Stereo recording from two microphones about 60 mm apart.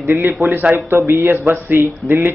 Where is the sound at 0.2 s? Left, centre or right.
Right.